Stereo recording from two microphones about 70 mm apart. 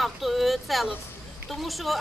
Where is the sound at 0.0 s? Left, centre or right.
Centre.